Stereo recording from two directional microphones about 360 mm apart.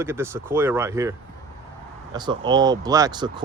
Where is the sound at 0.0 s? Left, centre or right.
Centre.